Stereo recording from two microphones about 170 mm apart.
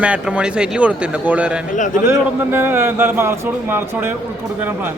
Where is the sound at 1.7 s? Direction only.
50° left (ahead or behind).